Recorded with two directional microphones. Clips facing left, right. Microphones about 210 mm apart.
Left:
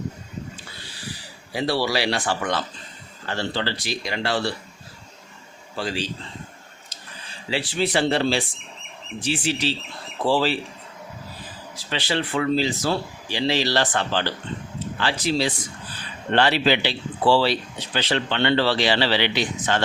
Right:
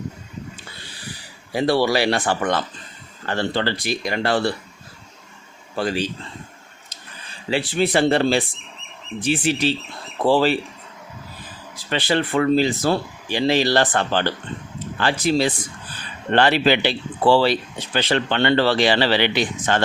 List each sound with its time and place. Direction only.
1.5 s speech: 55° right (ahead or behind)
5.7 s speech: 55° right (ahead or behind)
7.5 s speech: 55° right (ahead or behind)
11.9 s speech: 50° right (ahead or behind)